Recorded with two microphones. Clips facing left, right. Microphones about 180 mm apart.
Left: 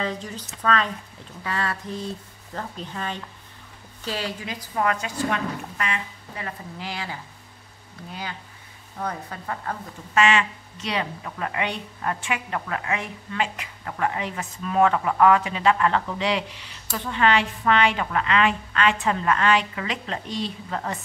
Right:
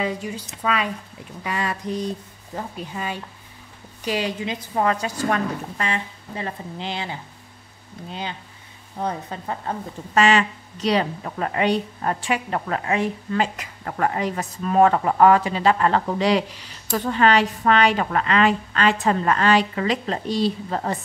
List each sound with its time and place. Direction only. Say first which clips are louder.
0.0 s a woman's voice: right 3 dB; 10° right (ahead or behind)
10.1 s a woman's voice: right 3 dB; 35° right (ahead or behind)